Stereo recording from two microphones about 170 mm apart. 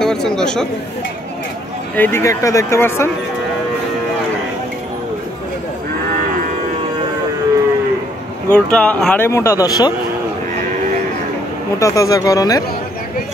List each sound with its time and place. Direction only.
0.0 s speech: 5° left (ahead or behind)
2.0 s speech: 15° left (ahead or behind)
8.5 s speech: 5° left (ahead or behind); by 9.9 s 20° left (ahead or behind)
11.8 s speech: 20° left (ahead or behind)